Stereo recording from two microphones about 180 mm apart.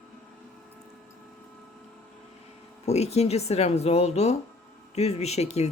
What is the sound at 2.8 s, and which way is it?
Speech, 35° left (ahead or behind).